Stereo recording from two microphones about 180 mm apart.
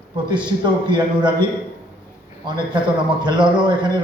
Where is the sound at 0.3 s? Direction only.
25° right (ahead or behind).